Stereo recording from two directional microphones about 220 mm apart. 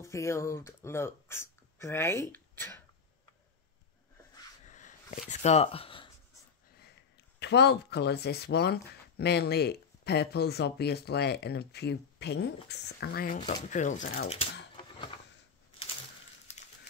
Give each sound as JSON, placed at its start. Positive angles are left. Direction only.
{"t": 0.0, "sound": "speech", "side_deg": 15}
{"t": 4.6, "sound": "dog", "side_deg": 35}
{"t": 5.3, "sound": "speech", "side_deg": 30}
{"t": 7.3, "sound": "speech", "side_deg": 50}